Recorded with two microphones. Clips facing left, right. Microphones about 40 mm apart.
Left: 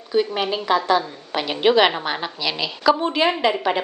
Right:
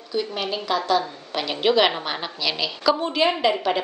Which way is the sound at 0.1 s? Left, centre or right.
Left.